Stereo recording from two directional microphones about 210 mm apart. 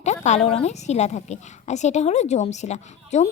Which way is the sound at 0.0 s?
35° left (ahead or behind).